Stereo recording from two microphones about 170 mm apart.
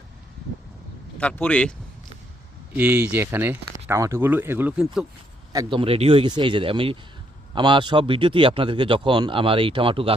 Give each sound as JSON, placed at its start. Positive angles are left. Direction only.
{"t": 1.2, "sound": "speech", "side_deg": 5}
{"t": 2.7, "sound": "speech", "side_deg": -10}
{"t": 5.5, "sound": "speech", "side_deg": -30}